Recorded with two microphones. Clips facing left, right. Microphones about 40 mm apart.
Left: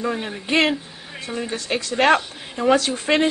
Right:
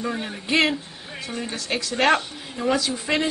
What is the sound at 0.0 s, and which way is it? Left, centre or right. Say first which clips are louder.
Speech: left 3 dB; centre.